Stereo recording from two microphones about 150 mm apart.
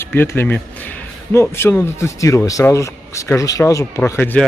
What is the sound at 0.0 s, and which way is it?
Speech, 15° left (ahead or behind).